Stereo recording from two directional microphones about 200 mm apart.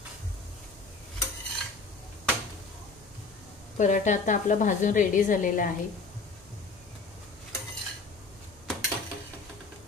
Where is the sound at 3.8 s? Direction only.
40° left (ahead or behind).